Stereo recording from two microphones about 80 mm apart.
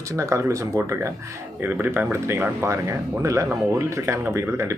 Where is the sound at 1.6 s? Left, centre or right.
Right.